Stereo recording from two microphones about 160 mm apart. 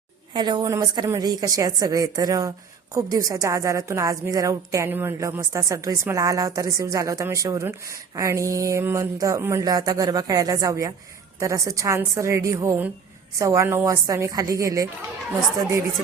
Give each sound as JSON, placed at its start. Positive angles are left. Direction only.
{"t": 0.3, "sound": "a woman's voice", "side_deg": -25}